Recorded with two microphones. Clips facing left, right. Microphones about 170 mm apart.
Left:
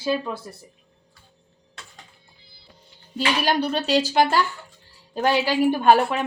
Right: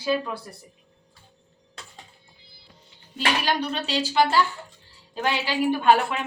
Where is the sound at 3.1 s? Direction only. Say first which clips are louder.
Left 3 dB; 40° left (ahead or behind).